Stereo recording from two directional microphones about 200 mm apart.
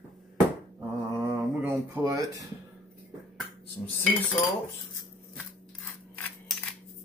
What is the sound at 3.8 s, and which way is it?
Speech, 15° left (ahead or behind).